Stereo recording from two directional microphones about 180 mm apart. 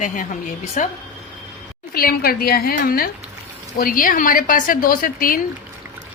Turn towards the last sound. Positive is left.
turn(degrees=50)  # may be behind; listen again after turning